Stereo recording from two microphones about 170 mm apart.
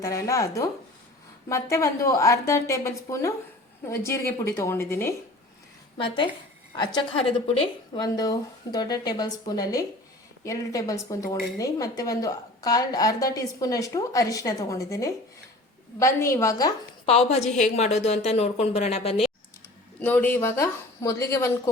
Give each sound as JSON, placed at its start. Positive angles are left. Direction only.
{"t": 0.0, "sound": "a woman's voice", "side_deg": 20}
{"t": 6.0, "sound": "a woman's voice", "side_deg": 30}
{"t": 8.0, "sound": "a woman's voice", "side_deg": 20}
{"t": 17.1, "sound": "speech", "side_deg": 35}
{"t": 20.0, "sound": "speech", "side_deg": 10}